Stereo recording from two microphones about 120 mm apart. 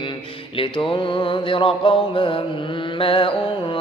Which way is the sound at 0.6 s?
45° left (ahead or behind).